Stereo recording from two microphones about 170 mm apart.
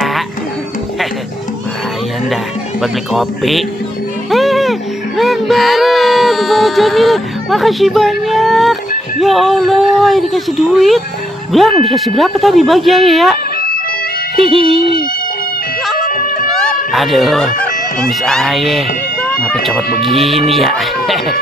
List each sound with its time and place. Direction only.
2.8 s speech: centre (ahead or behind)
4.3 s music: centre (ahead or behind)
9.2 s speech: centre (ahead or behind)
16.1 s music: 55° left (ahead or behind)
16.9 s speech: centre (ahead or behind)